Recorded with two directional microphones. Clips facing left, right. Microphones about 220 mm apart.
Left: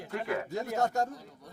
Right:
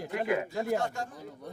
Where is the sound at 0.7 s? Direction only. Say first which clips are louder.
Left 7 dB; 40° left (ahead or behind).